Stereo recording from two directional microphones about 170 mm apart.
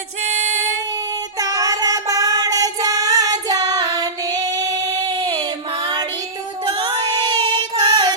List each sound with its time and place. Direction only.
1.4 s child singing: 20° right (ahead or behind)
6.7 s music: 30° right (ahead or behind)